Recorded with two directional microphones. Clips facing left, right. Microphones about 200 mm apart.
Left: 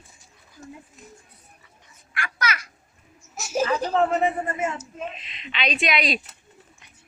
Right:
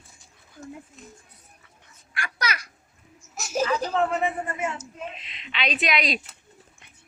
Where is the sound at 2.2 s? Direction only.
35° right (ahead or behind).